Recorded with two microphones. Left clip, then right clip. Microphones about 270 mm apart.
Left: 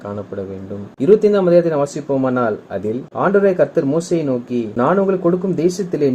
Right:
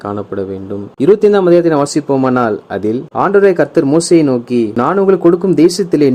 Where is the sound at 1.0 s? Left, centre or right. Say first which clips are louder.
Right 4 dB; right.